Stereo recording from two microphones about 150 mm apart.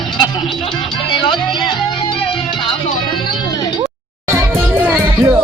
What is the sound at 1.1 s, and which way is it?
Music, 35° left (ahead or behind).